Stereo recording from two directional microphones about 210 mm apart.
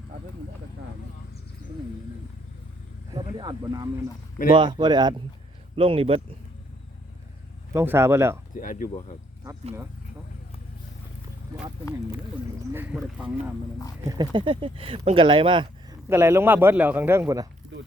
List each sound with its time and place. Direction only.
3.1 s speech: 20° right (ahead or behind)
7.7 s a man's voice: 10° right (ahead or behind)
8.5 s speech: 40° left (ahead or behind)
12.7 s speech: 5° right (ahead or behind)
14.1 s speech: 20° right (ahead or behind)
16.0 s a man's voice: 10° right (ahead or behind)